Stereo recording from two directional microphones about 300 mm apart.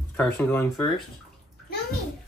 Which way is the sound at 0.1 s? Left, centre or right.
Centre.